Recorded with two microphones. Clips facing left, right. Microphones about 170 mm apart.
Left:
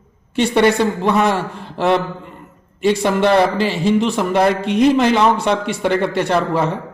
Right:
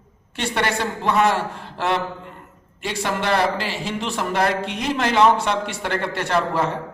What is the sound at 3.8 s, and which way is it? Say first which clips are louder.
A woman's voice: left 10 dB; 15° left (ahead or behind).